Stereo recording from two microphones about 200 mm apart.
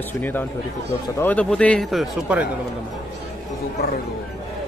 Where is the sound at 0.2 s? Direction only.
10° left (ahead or behind).